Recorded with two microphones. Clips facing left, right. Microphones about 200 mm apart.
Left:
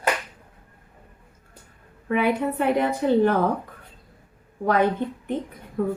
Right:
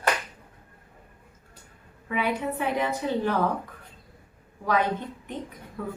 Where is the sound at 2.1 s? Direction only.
55° left (ahead or behind).